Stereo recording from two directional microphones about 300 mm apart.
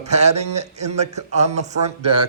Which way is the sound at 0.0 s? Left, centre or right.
Right.